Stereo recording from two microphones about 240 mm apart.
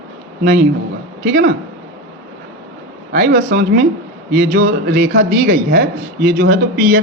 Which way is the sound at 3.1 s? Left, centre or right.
Right.